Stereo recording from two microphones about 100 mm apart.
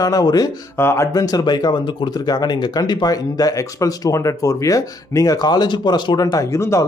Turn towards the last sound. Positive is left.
turn(degrees=30)  # may be behind; listen again after turning